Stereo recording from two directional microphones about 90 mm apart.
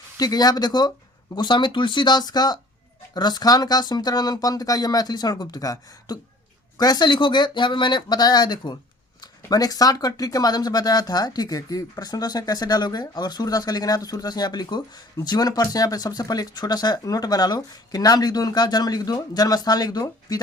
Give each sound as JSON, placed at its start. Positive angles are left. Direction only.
{"t": 0.2, "sound": "speech", "side_deg": 45}